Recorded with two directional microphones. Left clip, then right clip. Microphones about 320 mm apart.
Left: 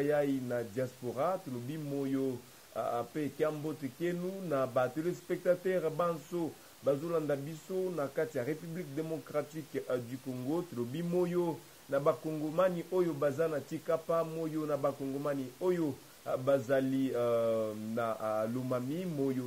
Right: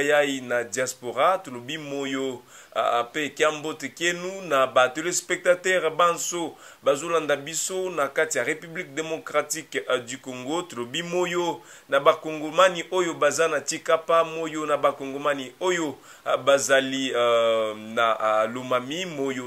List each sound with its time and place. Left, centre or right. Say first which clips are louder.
0.0 s a man's voice: right 10 dB; centre